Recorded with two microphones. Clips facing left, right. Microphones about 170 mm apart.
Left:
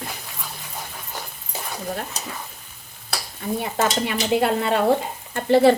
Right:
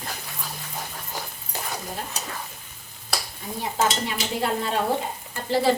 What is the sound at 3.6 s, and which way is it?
Stir, 70° left (ahead or behind).